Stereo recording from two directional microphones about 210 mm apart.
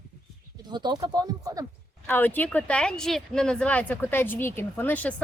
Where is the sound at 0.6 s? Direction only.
20° right (ahead or behind).